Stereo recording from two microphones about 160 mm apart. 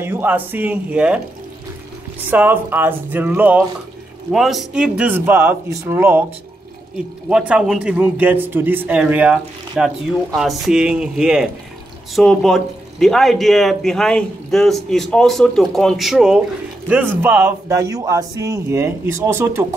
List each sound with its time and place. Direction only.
0.0 s a man's voice: 15° right (ahead or behind)
2.2 s a man's voice: 10° right (ahead or behind)
7.2 s a man's voice: 5° right (ahead or behind)